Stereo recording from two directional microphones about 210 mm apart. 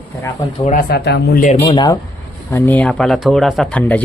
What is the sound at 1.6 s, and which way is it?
Speech, 20° left (ahead or behind).